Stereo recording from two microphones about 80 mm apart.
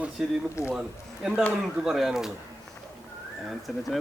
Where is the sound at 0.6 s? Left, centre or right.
Left.